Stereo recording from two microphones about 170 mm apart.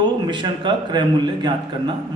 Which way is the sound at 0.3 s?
25° right (ahead or behind).